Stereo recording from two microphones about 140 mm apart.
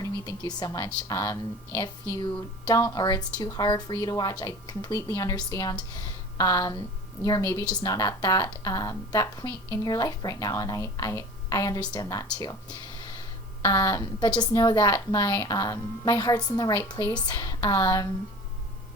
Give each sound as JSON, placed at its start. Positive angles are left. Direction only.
{"t": 0.0, "sound": "a woman's voice", "side_deg": 25}
{"t": 13.7, "sound": "a woman's voice", "side_deg": 30}